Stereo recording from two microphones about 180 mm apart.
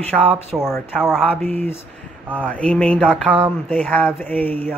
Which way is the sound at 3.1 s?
5° right (ahead or behind).